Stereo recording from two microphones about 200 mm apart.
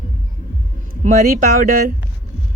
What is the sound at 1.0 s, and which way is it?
Speech, 45° right (ahead or behind).